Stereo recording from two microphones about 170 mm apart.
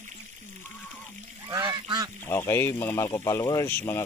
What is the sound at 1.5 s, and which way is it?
Goose, 25° right (ahead or behind).